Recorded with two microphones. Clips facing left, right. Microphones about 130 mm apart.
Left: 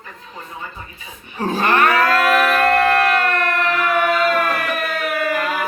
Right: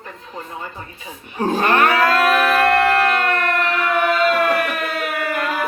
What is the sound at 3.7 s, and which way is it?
Music, 5° left (ahead or behind).